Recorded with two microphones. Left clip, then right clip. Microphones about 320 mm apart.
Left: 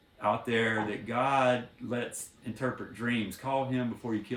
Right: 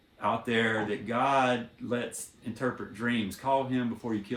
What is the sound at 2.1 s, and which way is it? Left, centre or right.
Speech, centre.